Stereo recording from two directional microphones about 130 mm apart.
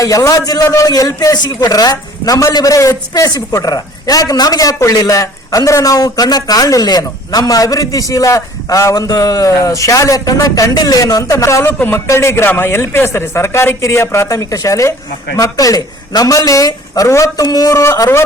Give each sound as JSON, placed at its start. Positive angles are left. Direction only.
{"t": 0.0, "sound": "a man's voice", "side_deg": 25}